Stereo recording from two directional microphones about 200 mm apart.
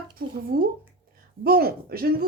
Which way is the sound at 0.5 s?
50° right (ahead or behind).